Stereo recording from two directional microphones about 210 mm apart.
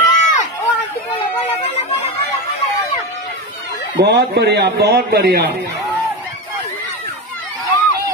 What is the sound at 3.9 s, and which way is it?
A man's voice, 50° right (ahead or behind).